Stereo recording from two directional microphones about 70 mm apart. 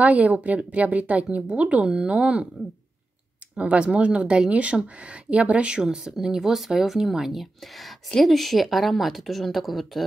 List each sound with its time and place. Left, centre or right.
0.0 s speech: centre
3.5 s speech: centre